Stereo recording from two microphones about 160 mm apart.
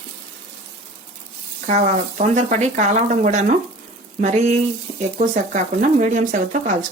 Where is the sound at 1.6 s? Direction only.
50° right (ahead or behind).